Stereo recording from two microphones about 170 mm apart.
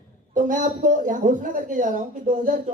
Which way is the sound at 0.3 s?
50° right (ahead or behind).